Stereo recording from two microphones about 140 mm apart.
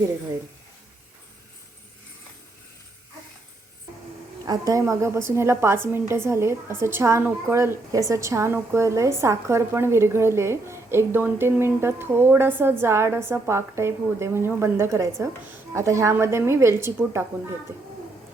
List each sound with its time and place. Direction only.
4.4 s a woman's voice: 25° right (ahead or behind)